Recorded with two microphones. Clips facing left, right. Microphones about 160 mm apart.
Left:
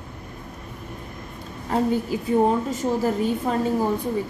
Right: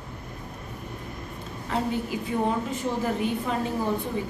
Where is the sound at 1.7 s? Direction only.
40° left (ahead or behind).